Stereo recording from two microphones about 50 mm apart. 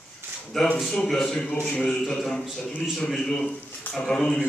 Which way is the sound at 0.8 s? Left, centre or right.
Centre.